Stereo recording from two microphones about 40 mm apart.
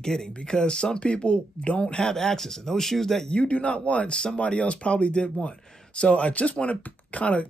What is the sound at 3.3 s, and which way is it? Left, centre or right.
Speech, left.